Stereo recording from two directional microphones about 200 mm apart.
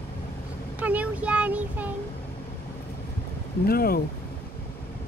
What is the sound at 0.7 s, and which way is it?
Speech, 5° right (ahead or behind).